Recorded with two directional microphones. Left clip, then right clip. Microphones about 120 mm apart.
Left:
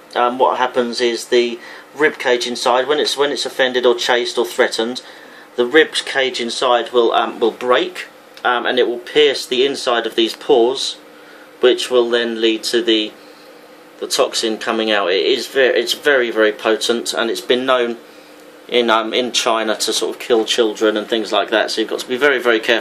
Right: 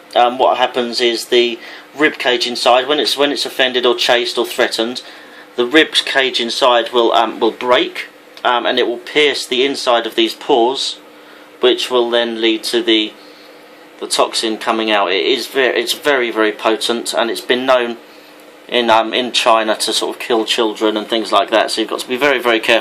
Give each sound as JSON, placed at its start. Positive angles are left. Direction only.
{"t": 0.1, "sound": "speech", "side_deg": -40}